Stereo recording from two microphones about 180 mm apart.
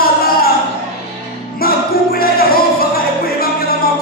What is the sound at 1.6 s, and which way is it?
Music, 55° left (ahead or behind).